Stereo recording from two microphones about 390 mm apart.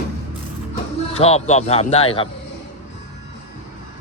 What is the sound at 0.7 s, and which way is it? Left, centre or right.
Speech, centre.